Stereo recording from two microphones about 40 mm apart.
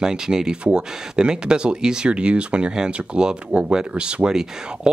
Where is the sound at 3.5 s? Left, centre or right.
Right.